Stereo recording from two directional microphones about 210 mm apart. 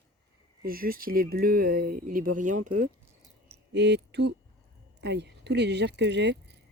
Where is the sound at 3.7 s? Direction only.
55° right (ahead or behind).